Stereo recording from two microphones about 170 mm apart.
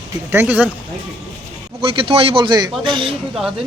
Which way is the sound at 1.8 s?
35° right (ahead or behind).